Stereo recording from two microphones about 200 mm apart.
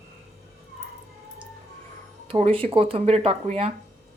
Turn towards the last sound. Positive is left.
turn(degrees=-30)  # may be behind; listen again after turning